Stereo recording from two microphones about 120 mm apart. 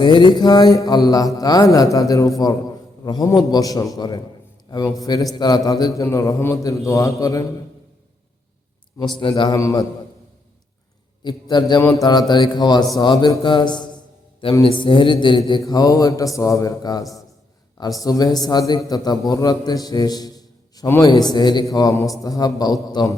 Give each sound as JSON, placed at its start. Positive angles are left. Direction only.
{"t": 0.0, "sound": "a man's voice", "side_deg": 40}
{"t": 9.1, "sound": "speech", "side_deg": 40}
{"t": 11.2, "sound": "speech", "side_deg": 40}
{"t": 11.8, "sound": "a man's voice", "side_deg": 25}